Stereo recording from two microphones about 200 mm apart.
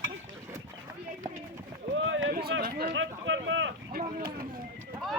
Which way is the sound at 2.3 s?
50° right (ahead or behind).